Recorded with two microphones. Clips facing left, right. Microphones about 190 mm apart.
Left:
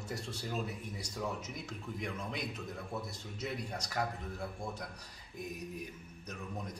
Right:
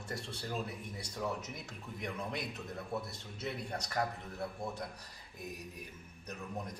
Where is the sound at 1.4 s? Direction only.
Centre (ahead or behind).